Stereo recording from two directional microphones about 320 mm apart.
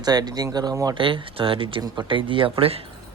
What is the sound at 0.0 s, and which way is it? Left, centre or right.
Speech, centre.